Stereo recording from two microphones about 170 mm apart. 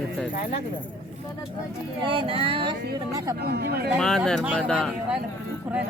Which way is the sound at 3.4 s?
70° right (ahead or behind).